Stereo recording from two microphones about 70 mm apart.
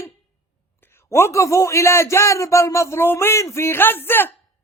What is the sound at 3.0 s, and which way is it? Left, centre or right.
Speech, left.